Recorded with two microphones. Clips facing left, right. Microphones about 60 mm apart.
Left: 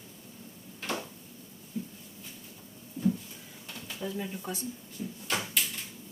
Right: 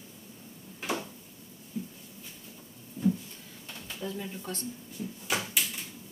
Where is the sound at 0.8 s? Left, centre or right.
Centre.